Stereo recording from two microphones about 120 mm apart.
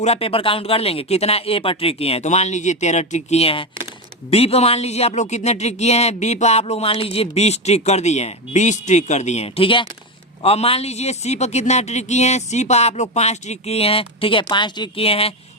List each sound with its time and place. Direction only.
0.0 s speech: 55° left (ahead or behind); by 15.0 s 40° left (ahead or behind)
15.0 s speech: 55° left (ahead or behind)